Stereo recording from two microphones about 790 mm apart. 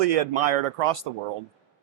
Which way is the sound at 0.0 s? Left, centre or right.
Right.